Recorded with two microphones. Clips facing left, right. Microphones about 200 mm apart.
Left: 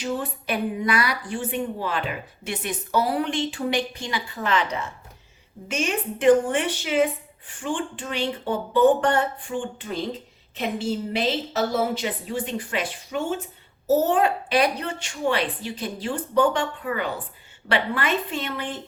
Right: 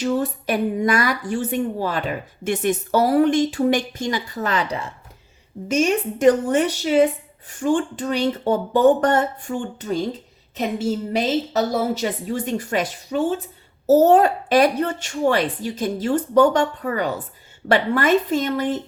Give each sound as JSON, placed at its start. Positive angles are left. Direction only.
{"t": 0.0, "sound": "a woman's voice", "side_deg": -40}